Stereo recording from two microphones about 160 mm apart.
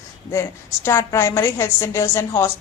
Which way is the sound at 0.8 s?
15° left (ahead or behind).